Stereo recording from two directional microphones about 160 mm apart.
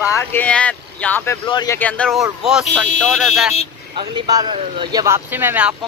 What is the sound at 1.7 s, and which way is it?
Speech, 10° left (ahead or behind).